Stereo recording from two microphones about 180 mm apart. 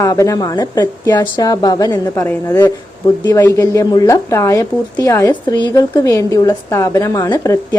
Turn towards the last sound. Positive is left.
turn(degrees=20)  # may be behind; listen again after turning